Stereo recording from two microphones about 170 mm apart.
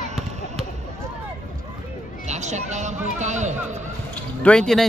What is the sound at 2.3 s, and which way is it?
A man's voice, 45° right (ahead or behind).